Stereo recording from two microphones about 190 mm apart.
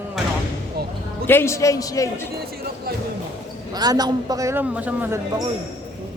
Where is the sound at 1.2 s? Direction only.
15° left (ahead or behind).